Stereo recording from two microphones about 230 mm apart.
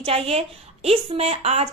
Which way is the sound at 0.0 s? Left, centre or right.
Right.